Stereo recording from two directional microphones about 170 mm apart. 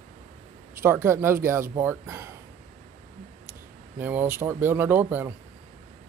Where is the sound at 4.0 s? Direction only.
10° right (ahead or behind).